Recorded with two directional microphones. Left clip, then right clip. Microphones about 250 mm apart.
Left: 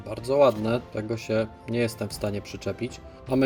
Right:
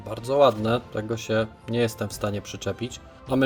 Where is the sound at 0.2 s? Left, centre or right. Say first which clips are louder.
Right 1 dB; centre.